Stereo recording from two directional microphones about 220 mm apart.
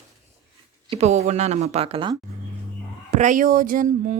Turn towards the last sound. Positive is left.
turn(degrees=-35)  # may be behind; listen again after turning